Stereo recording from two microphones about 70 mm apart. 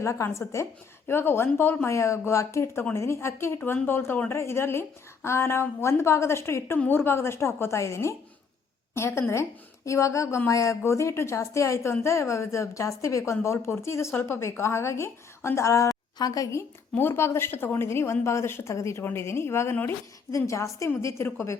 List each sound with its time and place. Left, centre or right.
0.0 s a woman's voice: left
1.9 s a woman's voice: left
16.1 s a woman's voice: left
17.0 s a woman's voice: left